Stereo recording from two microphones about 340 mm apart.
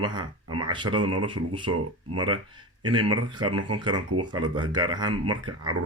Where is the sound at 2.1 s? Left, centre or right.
Centre.